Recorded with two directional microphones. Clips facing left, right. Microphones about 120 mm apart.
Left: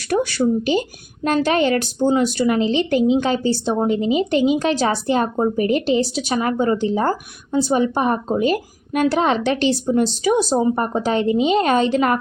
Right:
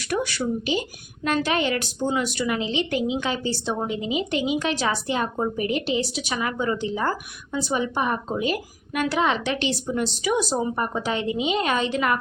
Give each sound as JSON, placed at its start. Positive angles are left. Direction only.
{"t": 0.1, "sound": "a woman's voice", "side_deg": 35}